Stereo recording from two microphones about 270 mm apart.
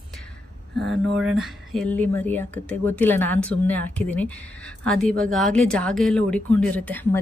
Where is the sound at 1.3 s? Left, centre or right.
Centre.